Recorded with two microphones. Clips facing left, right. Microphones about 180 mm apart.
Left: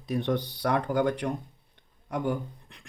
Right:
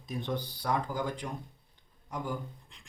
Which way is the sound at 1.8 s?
65° left (ahead or behind).